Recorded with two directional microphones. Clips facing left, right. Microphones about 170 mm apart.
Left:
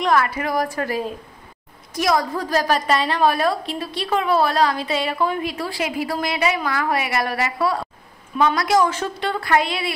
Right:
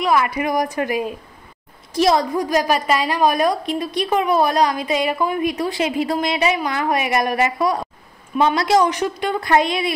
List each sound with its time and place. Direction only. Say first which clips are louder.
0.0 s a woman's voice: right 1 dB; 10° right (ahead or behind)
2.3 s a woman's voice: right 2 dB; 15° right (ahead or behind)